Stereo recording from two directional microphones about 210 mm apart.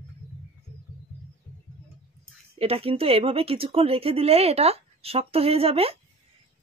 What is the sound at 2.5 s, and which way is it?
Speech, 30° right (ahead or behind).